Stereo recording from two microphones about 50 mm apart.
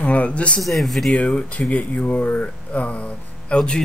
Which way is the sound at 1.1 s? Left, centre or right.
Left.